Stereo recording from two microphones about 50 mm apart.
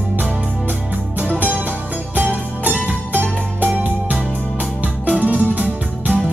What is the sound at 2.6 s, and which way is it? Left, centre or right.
Music, right.